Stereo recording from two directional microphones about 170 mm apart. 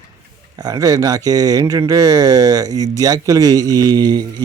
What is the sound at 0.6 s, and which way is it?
Speech, 20° right (ahead or behind).